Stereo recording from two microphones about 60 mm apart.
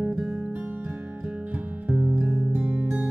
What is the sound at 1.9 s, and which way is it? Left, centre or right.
Music, right.